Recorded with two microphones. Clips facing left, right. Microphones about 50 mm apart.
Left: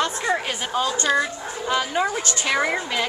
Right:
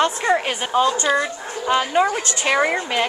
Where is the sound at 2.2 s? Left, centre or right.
Right.